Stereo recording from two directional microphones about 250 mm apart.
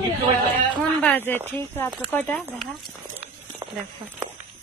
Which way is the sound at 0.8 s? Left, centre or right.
Centre.